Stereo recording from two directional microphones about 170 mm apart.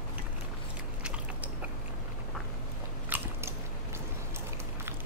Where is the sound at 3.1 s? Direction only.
15° right (ahead or behind).